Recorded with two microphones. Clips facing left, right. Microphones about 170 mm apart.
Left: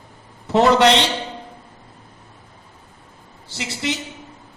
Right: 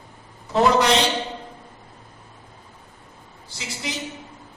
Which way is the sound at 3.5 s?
75° left (ahead or behind).